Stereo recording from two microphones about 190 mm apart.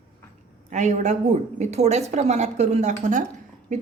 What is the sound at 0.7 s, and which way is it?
A woman's voice, 40° right (ahead or behind).